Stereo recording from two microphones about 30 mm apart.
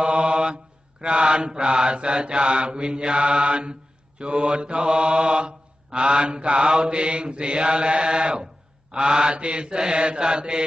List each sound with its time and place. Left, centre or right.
0.0 s mantra: right